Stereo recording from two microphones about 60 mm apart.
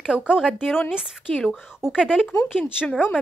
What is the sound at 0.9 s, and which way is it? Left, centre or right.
Speech, centre.